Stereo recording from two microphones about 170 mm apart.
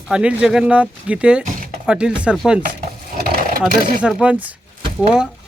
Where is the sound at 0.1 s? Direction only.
5° right (ahead or behind).